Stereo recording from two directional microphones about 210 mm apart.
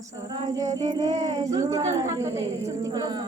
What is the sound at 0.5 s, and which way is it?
A woman's voice, 15° right (ahead or behind).